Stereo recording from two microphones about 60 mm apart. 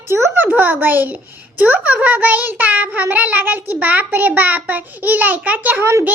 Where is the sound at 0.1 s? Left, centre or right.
Right.